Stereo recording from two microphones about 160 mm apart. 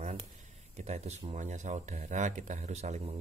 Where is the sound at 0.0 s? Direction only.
45° right (ahead or behind).